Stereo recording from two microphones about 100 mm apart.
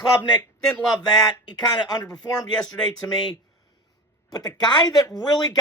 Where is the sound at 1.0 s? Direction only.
45° left (ahead or behind).